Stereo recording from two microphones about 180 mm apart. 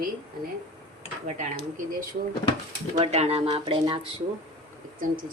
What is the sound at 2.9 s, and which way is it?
Speech, 35° right (ahead or behind).